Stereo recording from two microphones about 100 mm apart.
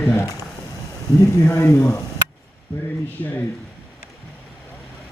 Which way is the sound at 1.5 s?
30° left (ahead or behind).